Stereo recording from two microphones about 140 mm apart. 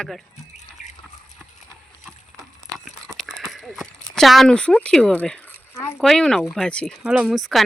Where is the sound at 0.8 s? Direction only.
60° left (ahead or behind).